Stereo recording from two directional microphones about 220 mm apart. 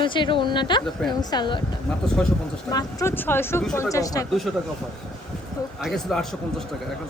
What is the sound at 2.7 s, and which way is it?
Speech, 15° left (ahead or behind).